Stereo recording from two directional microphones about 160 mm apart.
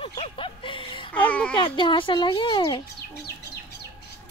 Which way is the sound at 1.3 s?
5° left (ahead or behind).